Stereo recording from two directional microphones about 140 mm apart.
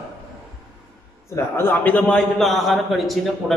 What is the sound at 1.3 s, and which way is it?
A man's voice, 15° left (ahead or behind).